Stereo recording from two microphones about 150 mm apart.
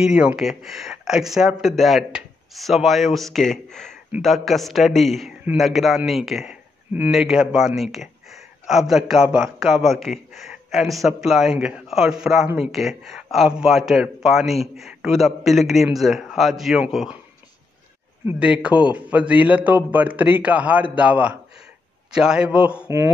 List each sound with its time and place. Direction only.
0.0 s speech: 5° right (ahead or behind)
18.2 s a man's voice: 5° right (ahead or behind)